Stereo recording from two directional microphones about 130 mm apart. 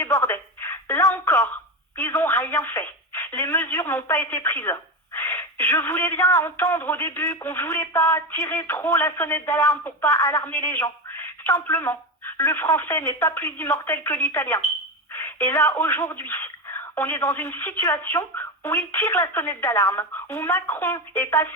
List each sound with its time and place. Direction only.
0.0 s music: 20° left (ahead or behind)
2.0 s speech: 15° left (ahead or behind)